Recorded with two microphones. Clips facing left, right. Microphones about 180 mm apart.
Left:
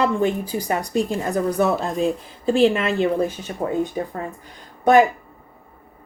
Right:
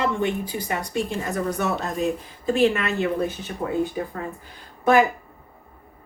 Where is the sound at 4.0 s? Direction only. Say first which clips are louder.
Left 2 dB; 35° left (ahead or behind).